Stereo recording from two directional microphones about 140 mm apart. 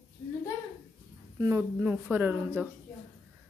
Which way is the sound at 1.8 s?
10° right (ahead or behind).